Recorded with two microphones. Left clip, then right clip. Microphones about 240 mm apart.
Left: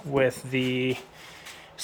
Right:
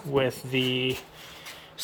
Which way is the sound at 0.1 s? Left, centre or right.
Centre.